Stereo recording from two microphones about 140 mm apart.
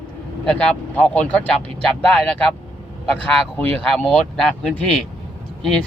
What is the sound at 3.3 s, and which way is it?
A man's voice, 5° left (ahead or behind).